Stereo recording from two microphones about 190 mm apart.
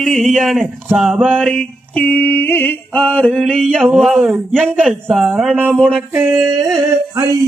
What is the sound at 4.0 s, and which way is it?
Speech, centre (ahead or behind).